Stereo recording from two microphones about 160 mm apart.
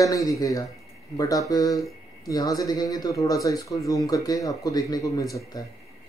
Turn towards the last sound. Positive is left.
turn(degrees=20)  # may be behind; listen again after turning